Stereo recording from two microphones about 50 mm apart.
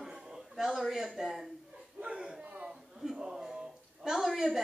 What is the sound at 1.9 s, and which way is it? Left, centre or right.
Bow-wow, right.